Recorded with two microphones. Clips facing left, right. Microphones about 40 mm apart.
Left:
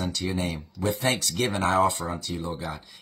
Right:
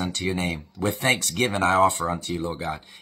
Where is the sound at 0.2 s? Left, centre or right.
Right.